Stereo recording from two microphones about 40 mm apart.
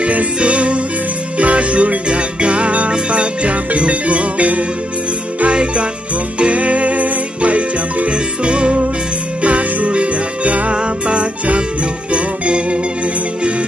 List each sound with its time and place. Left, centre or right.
0.0 s music: right
5.5 s jingle bell: right
6.4 s music: right